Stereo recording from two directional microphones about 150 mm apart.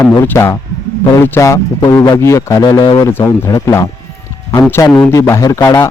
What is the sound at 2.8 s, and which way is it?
Speech, 30° left (ahead or behind).